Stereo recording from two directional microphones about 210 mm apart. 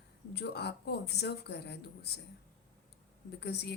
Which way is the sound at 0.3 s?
50° left (ahead or behind).